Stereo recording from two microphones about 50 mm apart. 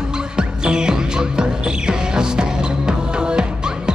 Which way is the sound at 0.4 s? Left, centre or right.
Centre.